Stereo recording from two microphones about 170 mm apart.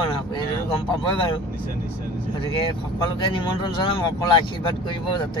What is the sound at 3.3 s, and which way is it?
Speech, 30° left (ahead or behind).